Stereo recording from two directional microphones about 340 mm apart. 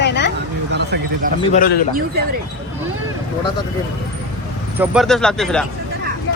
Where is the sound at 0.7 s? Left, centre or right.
Right.